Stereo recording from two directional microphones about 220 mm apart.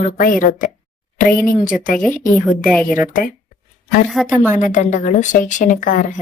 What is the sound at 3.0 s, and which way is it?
Speech, 35° left (ahead or behind).